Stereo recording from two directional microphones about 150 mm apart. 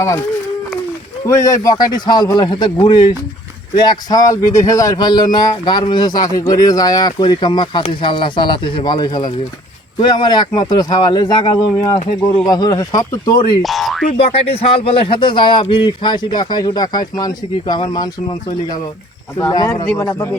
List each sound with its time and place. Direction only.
1.2 s speech: 20° left (ahead or behind)
13.6 s boing: centre (ahead or behind)
14.1 s speech: 40° left (ahead or behind)
20.1 s speech: 20° left (ahead or behind)